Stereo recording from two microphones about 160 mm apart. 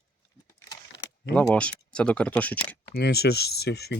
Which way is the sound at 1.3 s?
10° left (ahead or behind).